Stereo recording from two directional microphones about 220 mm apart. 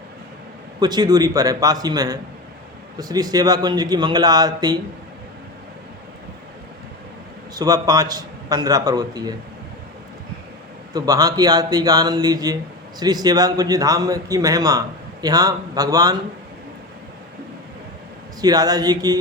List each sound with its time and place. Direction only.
0.8 s speech: 20° right (ahead or behind)
7.5 s speech: 15° right (ahead or behind)
10.9 s speech: 15° right (ahead or behind)
18.3 s speech: 15° right (ahead or behind)